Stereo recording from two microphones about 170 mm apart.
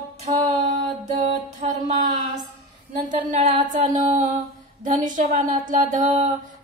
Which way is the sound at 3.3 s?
40° right (ahead or behind).